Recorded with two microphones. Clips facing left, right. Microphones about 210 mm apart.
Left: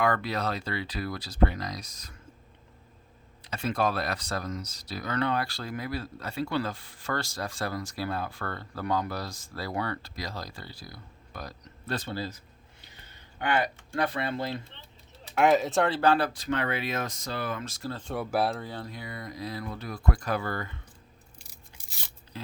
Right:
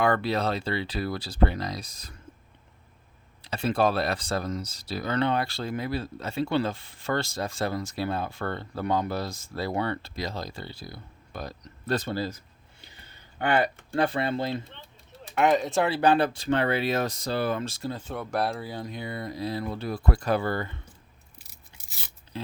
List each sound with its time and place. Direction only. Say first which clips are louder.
0.0 s speech: right 3 dB; 30° right (ahead or behind)
3.4 s speech: right 4 dB; 30° right (ahead or behind)
11.9 s speech: right 5 dB; 45° right (ahead or behind)
13.4 s speech: right 3 dB; 30° right (ahead or behind)
14.7 s a sound: right 4 dB; 50° right (ahead or behind)
15.4 s speech: even; centre (ahead or behind)
16.0 s speech: right 2 dB; 20° right (ahead or behind)
17.9 s speech: left 4 dB; centre (ahead or behind)
18.6 s speech: right 4 dB; 15° right (ahead or behind); by 20.7 s 30° right (ahead or behind)